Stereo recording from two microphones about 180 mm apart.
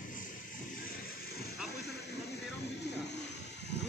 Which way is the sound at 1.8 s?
65° left (ahead or behind).